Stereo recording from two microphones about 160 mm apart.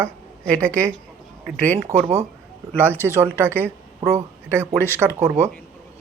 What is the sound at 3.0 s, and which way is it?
Speech, 15° right (ahead or behind).